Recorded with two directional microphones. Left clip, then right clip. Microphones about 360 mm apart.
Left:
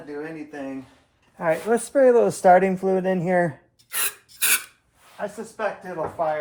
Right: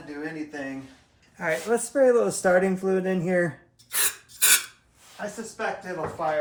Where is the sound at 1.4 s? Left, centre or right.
Centre.